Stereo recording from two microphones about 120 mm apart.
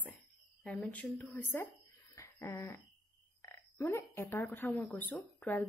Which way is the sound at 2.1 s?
25° left (ahead or behind).